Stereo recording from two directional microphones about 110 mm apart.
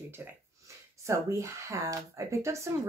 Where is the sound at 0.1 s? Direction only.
25° right (ahead or behind).